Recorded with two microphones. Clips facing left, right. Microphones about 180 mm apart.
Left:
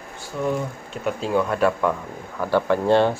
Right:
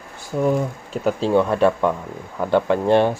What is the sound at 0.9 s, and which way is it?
Speech, 30° right (ahead or behind).